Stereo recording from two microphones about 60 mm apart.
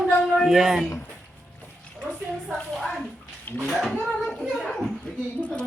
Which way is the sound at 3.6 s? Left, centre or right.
Centre.